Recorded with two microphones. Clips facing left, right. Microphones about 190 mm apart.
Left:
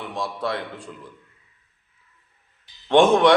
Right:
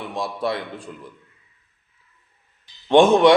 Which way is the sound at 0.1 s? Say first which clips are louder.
Right 3 dB; 15° right (ahead or behind).